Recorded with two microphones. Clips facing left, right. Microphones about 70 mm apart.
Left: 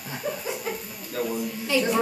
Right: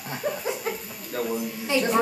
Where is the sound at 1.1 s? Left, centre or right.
Right.